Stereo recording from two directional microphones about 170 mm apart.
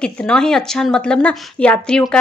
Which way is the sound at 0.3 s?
5° left (ahead or behind).